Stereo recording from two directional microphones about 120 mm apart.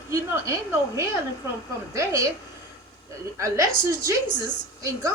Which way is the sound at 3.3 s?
25° right (ahead or behind).